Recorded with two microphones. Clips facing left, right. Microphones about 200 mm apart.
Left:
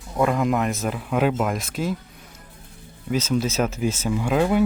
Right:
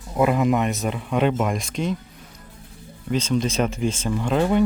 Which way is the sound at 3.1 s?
5° left (ahead or behind).